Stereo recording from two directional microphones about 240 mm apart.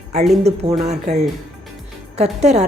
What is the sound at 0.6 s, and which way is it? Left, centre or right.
Speech, right.